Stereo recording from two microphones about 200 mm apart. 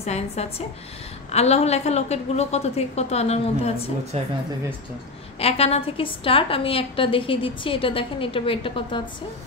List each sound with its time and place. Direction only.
0.0 s a woman's voice: 30° left (ahead or behind)
4.1 s speech: 30° right (ahead or behind)
5.4 s a woman's voice: 30° left (ahead or behind)